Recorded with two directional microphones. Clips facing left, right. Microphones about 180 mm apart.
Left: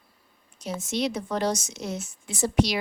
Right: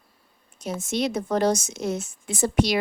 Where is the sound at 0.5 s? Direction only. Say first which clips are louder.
Right 2 dB; 50° right (ahead or behind).